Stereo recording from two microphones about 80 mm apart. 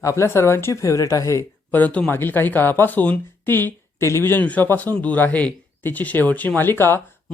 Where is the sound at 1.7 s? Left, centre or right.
Centre.